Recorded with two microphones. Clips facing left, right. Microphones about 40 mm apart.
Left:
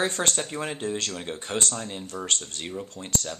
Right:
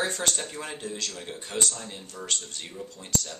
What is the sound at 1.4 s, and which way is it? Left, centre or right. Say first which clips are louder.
Speech: left 1 dB; left.